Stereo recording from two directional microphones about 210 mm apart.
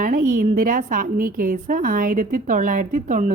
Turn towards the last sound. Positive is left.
turn(degrees=-35)  # may be behind; listen again after turning